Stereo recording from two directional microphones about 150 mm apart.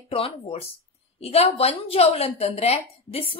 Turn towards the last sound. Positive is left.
turn(degrees=40)  # may be behind; listen again after turning